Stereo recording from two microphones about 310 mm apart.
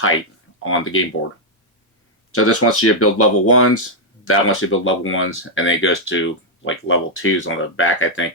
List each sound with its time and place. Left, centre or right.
0.6 s speech: left
2.3 s speech: left